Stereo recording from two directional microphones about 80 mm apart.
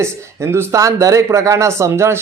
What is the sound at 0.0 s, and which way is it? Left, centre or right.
A man's voice, right.